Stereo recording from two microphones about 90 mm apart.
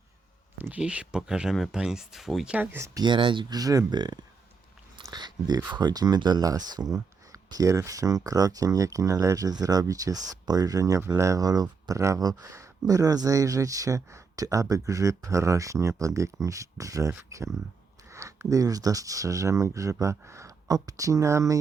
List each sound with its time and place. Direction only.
0.6 s speech: 15° right (ahead or behind)
2.6 s speech: 30° right (ahead or behind)
3.0 s speech: 65° right (ahead or behind)
3.5 s speech: 40° right (ahead or behind)